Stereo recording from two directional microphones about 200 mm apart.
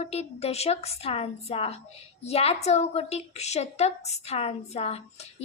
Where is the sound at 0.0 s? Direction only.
30° left (ahead or behind).